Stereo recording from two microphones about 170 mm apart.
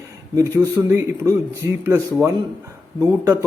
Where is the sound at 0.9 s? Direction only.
20° right (ahead or behind).